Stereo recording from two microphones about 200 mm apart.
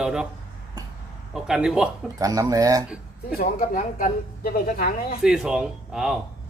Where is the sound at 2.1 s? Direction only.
15° right (ahead or behind).